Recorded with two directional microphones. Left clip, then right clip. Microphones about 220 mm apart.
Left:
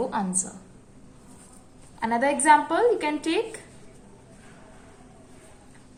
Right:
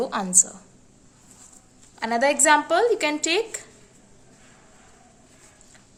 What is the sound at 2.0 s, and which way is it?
A woman's voice, 50° right (ahead or behind).